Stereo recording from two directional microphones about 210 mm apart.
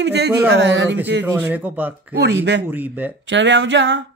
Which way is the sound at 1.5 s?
10° right (ahead or behind).